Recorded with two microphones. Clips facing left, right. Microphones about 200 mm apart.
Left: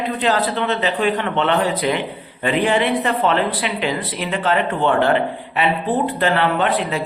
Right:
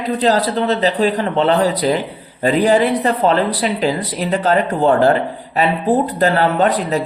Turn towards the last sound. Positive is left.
turn(degrees=-40)  # may be behind; listen again after turning